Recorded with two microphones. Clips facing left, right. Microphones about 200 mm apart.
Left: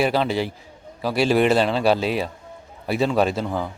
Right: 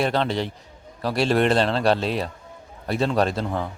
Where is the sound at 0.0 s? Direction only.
5° left (ahead or behind).